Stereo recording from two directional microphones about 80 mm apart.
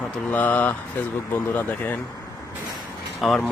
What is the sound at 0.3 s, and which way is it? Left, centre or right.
Speech, left.